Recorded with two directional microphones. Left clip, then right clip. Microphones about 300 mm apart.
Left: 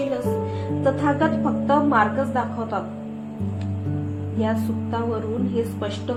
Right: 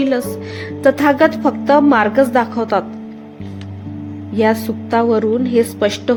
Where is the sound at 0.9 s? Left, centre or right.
Right.